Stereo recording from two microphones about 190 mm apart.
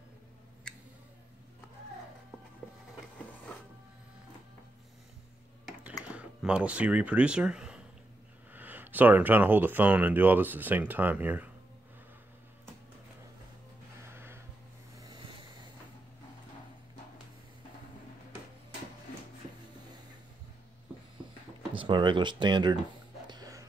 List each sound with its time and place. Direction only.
6.0 s speech: 5° right (ahead or behind)
14.0 s a sound: 10° right (ahead or behind)
15.0 s vehicle: 20° right (ahead or behind)
21.7 s speech: 25° right (ahead or behind)
23.2 s music: 20° right (ahead or behind)